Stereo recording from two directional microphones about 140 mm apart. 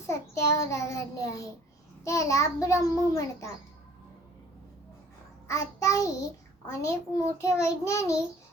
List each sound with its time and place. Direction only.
0.1 s a child's voice: 20° left (ahead or behind)
5.5 s a child's voice: 25° left (ahead or behind)